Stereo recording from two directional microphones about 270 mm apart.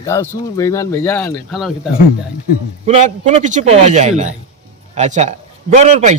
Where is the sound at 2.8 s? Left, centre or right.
Right.